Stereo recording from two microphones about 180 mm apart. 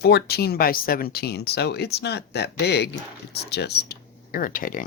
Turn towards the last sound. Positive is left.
turn(degrees=50)  # may be behind; listen again after turning